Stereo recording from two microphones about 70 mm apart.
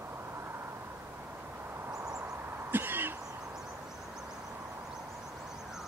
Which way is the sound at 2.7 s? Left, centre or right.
Right.